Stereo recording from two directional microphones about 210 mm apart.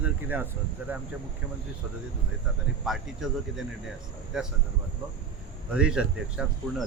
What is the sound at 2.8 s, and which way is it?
Speech, centre (ahead or behind).